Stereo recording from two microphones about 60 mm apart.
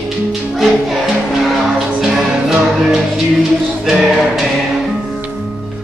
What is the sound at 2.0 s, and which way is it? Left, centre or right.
Music, centre.